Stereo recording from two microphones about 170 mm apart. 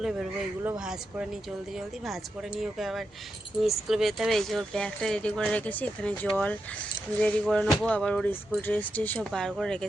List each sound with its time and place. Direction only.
0.0 s speech: centre (ahead or behind)